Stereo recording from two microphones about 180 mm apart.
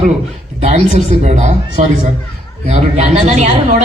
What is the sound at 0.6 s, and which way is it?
A woman's voice, 40° right (ahead or behind).